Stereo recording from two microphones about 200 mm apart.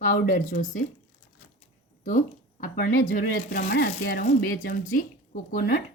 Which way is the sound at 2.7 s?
40° left (ahead or behind).